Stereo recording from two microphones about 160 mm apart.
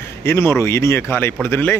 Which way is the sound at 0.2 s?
15° left (ahead or behind).